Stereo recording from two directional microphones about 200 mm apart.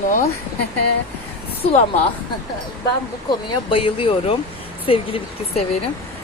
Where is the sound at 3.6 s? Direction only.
25° left (ahead or behind).